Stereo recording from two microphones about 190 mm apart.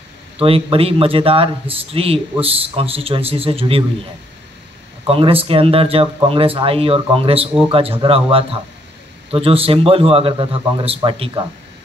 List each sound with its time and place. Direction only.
0.4 s speech: 30° right (ahead or behind)
5.0 s speech: 30° right (ahead or behind)